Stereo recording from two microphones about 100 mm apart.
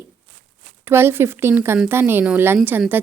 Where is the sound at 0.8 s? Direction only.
25° right (ahead or behind).